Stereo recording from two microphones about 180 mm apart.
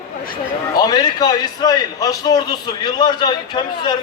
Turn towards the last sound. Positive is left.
turn(degrees=25)  # may be behind; listen again after turning